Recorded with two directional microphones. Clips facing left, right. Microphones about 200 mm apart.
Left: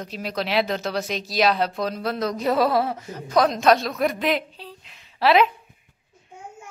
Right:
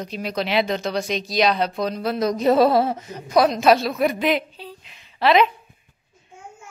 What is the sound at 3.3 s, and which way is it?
A woman's voice, 5° right (ahead or behind).